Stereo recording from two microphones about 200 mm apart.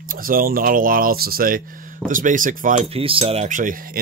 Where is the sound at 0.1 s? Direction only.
45° right (ahead or behind).